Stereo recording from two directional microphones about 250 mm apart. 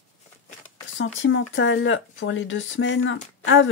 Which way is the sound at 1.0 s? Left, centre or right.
Left.